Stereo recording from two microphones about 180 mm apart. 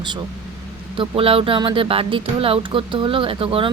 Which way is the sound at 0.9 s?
30° right (ahead or behind).